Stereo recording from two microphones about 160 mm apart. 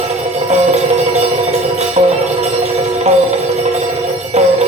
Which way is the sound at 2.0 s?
45° right (ahead or behind).